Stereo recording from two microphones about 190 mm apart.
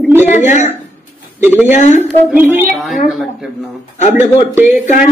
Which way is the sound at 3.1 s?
Centre (ahead or behind).